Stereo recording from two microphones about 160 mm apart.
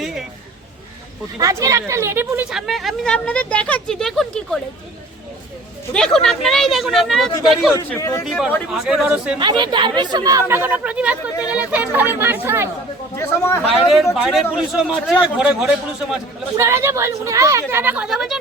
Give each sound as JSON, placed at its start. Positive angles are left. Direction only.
{"t": 1.4, "sound": "speech", "side_deg": -20}
{"t": 2.5, "sound": "speech", "side_deg": 0}
{"t": 5.9, "sound": "speech", "side_deg": 5}
{"t": 7.8, "sound": "a man's voice", "side_deg": 20}
{"t": 8.2, "sound": "speech", "side_deg": 0}
{"t": 9.4, "sound": "speech", "side_deg": -30}
{"t": 13.1, "sound": "a man's voice", "side_deg": 15}
{"t": 13.8, "sound": "speech", "side_deg": 0}
{"t": 16.6, "sound": "speech", "side_deg": -15}